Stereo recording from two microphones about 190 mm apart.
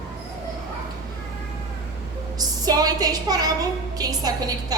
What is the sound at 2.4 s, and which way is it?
A woman's voice, 20° right (ahead or behind).